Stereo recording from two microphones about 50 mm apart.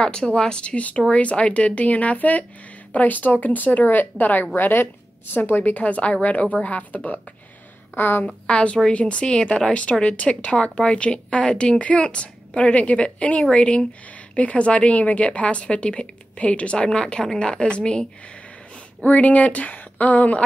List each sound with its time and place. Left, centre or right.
0.0 s a woman's voice: left
7.9 s a woman's voice: left
8.5 s a woman's voice: centre
19.0 s speech: left